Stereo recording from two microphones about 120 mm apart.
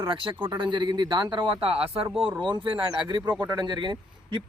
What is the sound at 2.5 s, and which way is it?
Speech, 40° right (ahead or behind).